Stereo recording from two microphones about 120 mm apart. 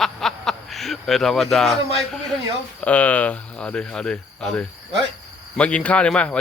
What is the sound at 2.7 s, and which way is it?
Speech, 10° left (ahead or behind).